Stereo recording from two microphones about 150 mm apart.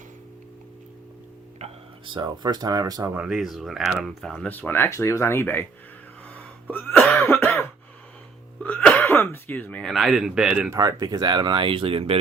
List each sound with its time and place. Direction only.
1.5 s speech: 40° right (ahead or behind)
3.2 s speech: 5° right (ahead or behind); by 5.6 s 15° left (ahead or behind)
6.3 s a sound: 10° left (ahead or behind)
7.2 s cough: 15° left (ahead or behind)
8.6 s speech: 10° left (ahead or behind)
10.7 s speech: 25° right (ahead or behind)